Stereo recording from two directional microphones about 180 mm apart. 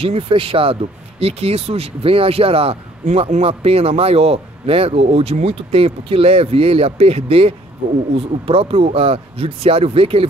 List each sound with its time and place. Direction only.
0.0 s speech: 30° right (ahead or behind)